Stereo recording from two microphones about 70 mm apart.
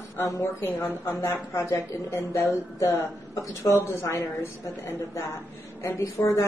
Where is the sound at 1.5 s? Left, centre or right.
Left.